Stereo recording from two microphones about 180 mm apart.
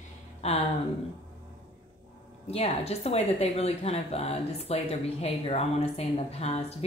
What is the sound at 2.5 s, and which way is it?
Speech, 35° left (ahead or behind).